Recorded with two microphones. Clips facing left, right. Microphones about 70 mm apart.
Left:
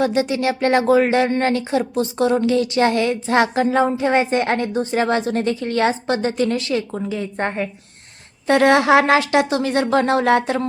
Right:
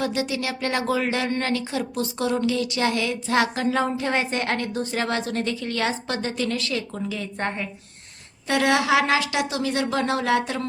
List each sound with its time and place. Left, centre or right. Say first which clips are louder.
0.0 s speech: left 7 dB; left
8.4 s speech: left 7 dB; left